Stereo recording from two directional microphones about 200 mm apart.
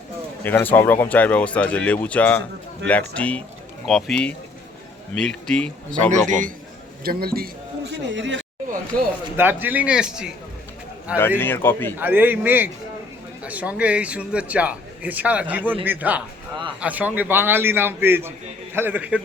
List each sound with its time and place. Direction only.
0.4 s speech: 10° left (ahead or behind)
6.1 s a man's voice: 40° right (ahead or behind)
7.0 s a man's voice: 50° right (ahead or behind)
9.3 s a man's voice: 10° right (ahead or behind)
11.2 s speech: 10° left (ahead or behind)
11.9 s a man's voice: 10° right (ahead or behind)